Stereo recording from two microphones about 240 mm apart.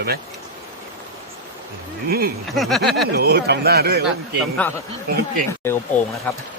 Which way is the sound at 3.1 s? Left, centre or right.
Right.